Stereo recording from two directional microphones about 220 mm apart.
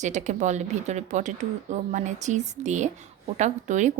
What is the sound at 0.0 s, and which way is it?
Speech, 30° right (ahead or behind).